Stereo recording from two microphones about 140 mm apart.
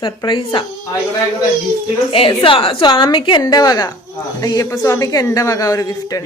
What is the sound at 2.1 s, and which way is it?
A woman's voice, 40° left (ahead or behind).